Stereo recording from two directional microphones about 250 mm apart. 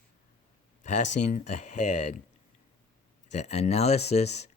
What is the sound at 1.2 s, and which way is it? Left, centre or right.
Speech, left.